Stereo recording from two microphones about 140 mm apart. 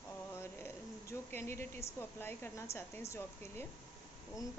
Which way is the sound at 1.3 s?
15° left (ahead or behind).